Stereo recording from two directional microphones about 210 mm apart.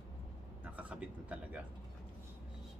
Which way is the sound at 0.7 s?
5° right (ahead or behind).